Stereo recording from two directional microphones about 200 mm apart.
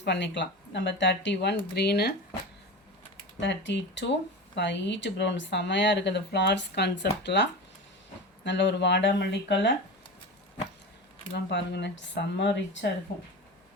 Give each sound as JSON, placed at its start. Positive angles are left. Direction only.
{"t": 0.0, "sound": "speech", "side_deg": 60}
{"t": 3.4, "sound": "speech", "side_deg": 65}
{"t": 11.4, "sound": "speech", "side_deg": 60}